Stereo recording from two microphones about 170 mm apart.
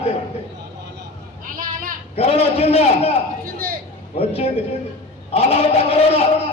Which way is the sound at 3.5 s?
60° right (ahead or behind).